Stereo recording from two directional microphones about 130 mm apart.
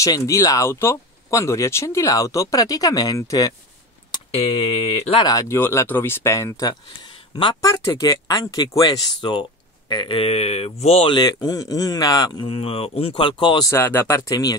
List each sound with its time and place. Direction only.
0.0 s speech: 25° left (ahead or behind)
4.5 s speech: 55° left (ahead or behind)
5.2 s speech: 25° left (ahead or behind)
7.6 s speech: 25° left (ahead or behind); by 11.1 s 50° left (ahead or behind)
11.1 s speech: 30° left (ahead or behind)
12.4 s speech: 45° left (ahead or behind)
13.7 s speech: 15° left (ahead or behind)